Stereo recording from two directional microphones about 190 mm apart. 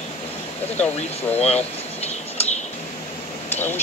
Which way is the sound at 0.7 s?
10° left (ahead or behind).